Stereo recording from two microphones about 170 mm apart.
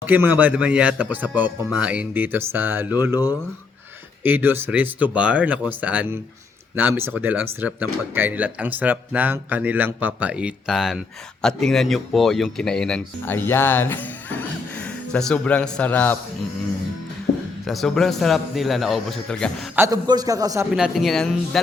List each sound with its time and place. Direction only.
0.0 s speech: 10° right (ahead or behind)
4.2 s speech: 10° right (ahead or behind); by 16.1 s 10° left (ahead or behind)
17.3 s a sound: 45° left (ahead or behind)
17.7 s speech: centre (ahead or behind)
19.7 s a man's voice: 15° right (ahead or behind)
20.7 s speech: centre (ahead or behind)